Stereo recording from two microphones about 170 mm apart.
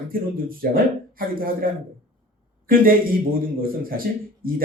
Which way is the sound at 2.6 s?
55° right (ahead or behind).